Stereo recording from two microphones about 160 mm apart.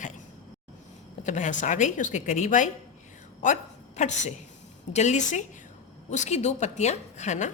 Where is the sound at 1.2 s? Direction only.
50° left (ahead or behind).